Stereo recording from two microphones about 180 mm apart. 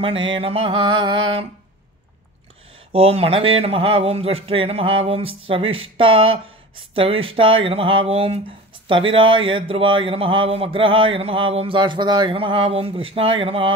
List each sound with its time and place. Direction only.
0.0 s speech: 30° right (ahead or behind)
2.9 s speech: 35° right (ahead or behind)